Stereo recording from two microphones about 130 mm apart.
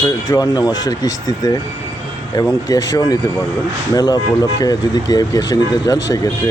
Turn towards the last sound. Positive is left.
turn(degrees=30)  # may be behind; listen again after turning